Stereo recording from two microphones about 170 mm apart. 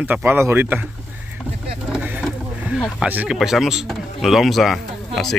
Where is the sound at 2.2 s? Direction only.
Centre (ahead or behind).